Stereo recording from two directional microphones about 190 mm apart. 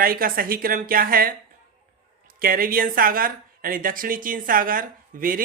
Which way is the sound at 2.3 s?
50° right (ahead or behind).